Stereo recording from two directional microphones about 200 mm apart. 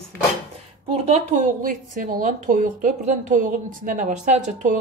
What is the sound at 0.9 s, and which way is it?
Speech, 30° right (ahead or behind).